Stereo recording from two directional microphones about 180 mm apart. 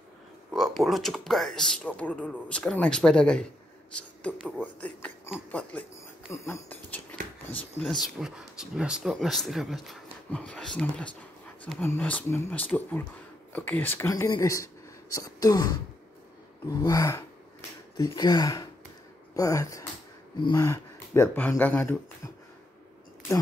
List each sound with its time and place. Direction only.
0.5 s a man's voice: centre (ahead or behind)
4.4 s speech: 5° right (ahead or behind)
4.7 s speech: 10° left (ahead or behind)
7.8 s speech: centre (ahead or behind); by 15.8 s 20° left (ahead or behind)
16.8 s speech: 20° left (ahead or behind)
20.6 s speech: 15° left (ahead or behind)